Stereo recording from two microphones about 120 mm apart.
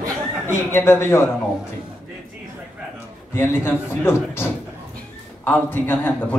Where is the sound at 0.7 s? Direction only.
20° left (ahead or behind).